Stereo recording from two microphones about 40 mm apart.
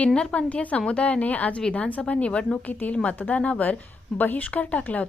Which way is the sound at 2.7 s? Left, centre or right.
Left.